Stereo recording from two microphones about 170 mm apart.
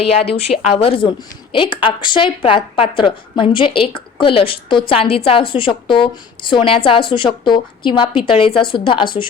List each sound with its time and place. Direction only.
0.0 s a woman's voice: 35° left (ahead or behind)